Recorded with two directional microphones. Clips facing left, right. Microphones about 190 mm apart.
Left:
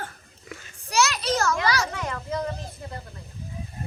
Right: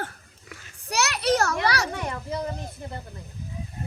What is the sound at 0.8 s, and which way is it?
Children playing, 65° right (ahead or behind).